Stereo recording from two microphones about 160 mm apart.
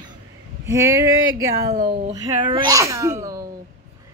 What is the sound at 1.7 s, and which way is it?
Speech, 40° right (ahead or behind).